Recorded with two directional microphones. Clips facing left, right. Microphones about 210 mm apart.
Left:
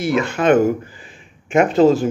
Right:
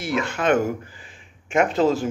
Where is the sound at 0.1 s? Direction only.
20° left (ahead or behind).